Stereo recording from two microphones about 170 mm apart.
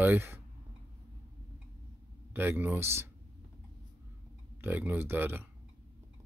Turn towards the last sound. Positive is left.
turn(degrees=-10)  # may be behind; listen again after turning